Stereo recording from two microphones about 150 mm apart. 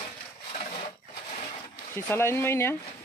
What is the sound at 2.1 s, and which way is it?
Speech, 15° left (ahead or behind).